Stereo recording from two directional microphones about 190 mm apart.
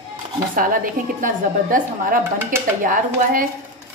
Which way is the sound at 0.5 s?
45° right (ahead or behind).